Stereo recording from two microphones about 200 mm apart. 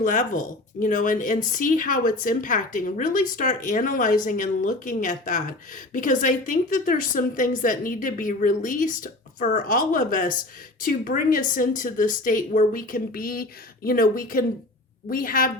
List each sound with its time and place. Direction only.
0.0 s a woman's voice: 40° left (ahead or behind)